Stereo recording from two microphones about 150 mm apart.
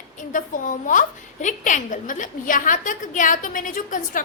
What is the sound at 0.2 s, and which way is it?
A woman's voice, 60° left (ahead or behind).